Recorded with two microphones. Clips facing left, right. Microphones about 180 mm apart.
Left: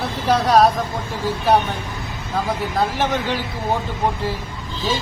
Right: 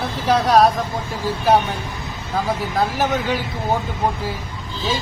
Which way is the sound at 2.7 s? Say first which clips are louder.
Right 1 dB; centre (ahead or behind).